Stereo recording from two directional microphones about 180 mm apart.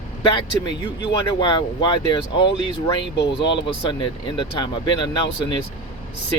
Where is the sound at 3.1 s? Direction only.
75° left (ahead or behind).